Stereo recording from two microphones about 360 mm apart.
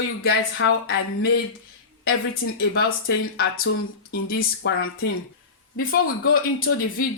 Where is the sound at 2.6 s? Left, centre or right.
Left.